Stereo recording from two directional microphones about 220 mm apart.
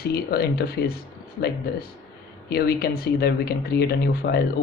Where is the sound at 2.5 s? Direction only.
45° left (ahead or behind).